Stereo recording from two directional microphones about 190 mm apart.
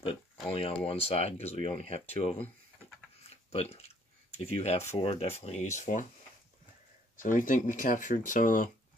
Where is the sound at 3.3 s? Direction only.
30° left (ahead or behind).